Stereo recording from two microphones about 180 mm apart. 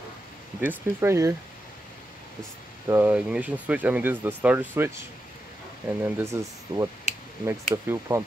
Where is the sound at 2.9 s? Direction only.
10° right (ahead or behind).